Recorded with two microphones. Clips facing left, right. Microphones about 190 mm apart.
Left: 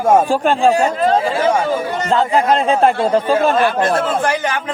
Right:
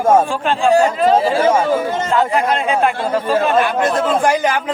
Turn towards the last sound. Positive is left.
turn(degrees=-15)  # may be behind; listen again after turning